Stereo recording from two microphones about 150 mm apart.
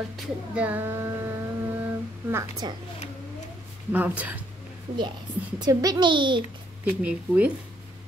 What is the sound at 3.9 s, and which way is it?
Speech, 10° right (ahead or behind).